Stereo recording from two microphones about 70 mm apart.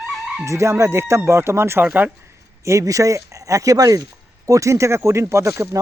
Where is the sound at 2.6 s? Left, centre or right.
Right.